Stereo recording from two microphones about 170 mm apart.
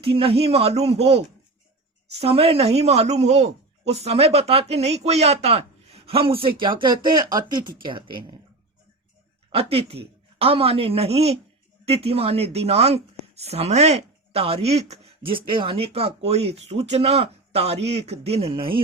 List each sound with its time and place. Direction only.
0.0 s speech: 35° right (ahead or behind)
9.5 s speech: 35° right (ahead or behind)